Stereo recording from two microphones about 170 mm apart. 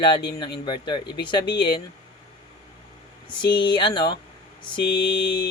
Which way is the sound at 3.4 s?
30° left (ahead or behind).